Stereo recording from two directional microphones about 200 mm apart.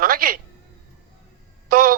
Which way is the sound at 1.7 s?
45° right (ahead or behind).